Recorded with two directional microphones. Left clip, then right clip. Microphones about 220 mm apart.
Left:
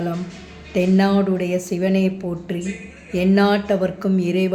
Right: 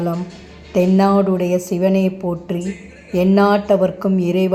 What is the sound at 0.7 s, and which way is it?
A woman's voice, 20° right (ahead or behind).